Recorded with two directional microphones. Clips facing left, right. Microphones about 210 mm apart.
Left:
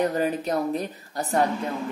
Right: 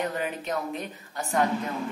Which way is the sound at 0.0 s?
35° left (ahead or behind).